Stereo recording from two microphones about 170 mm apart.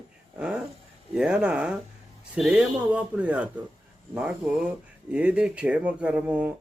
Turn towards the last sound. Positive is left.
turn(degrees=-5)  # may be behind; listen again after turning